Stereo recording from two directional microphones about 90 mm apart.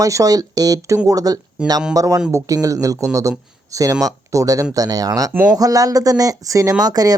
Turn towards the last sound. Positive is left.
turn(degrees=-45)  # may be behind; listen again after turning